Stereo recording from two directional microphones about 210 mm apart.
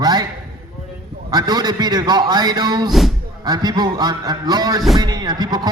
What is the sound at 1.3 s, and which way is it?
A man's voice, 20° right (ahead or behind).